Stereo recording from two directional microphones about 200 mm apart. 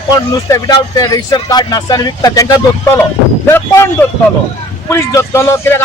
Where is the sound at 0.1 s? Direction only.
20° left (ahead or behind).